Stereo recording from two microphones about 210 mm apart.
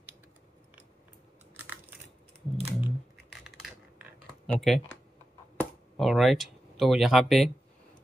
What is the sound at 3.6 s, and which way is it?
Typing, centre (ahead or behind).